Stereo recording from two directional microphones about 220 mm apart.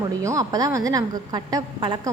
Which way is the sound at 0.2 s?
15° right (ahead or behind).